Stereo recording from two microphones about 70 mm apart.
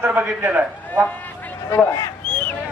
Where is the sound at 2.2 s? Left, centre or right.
Centre.